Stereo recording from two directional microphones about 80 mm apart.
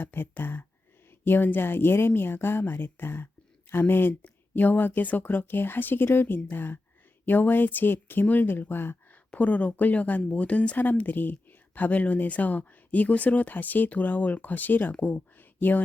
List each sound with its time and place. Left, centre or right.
0.0 s speech: left